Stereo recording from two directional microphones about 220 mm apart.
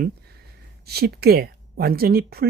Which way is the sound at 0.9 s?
45° right (ahead or behind).